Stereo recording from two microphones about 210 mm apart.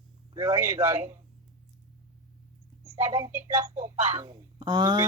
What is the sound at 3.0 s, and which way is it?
Speech, 15° right (ahead or behind).